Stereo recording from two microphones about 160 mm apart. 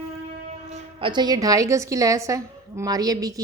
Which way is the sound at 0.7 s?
40° right (ahead or behind).